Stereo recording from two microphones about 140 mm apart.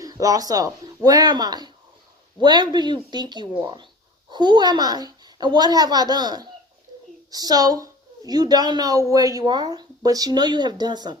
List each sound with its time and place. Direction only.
0.0 s a woman's voice: 25° right (ahead or behind)